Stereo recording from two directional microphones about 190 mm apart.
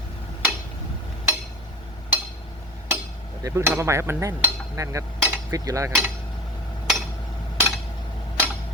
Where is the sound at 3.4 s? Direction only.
15° right (ahead or behind).